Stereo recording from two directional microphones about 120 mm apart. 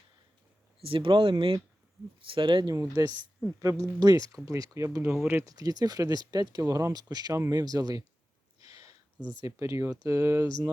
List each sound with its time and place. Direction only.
0.8 s speech: 50° right (ahead or behind)
2.7 s speech: 30° right (ahead or behind)
5.5 s speech: 35° right (ahead or behind)
8.6 s a sound: 30° right (ahead or behind)
9.4 s speech: 25° right (ahead or behind)